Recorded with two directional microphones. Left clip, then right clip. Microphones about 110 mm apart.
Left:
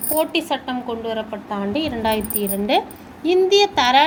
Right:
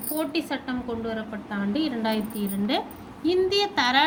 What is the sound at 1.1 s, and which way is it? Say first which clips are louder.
A woman's voice: left 7 dB; 50° left (ahead or behind).